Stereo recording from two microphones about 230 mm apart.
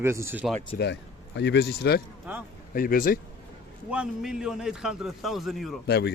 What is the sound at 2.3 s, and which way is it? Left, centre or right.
Speech, centre.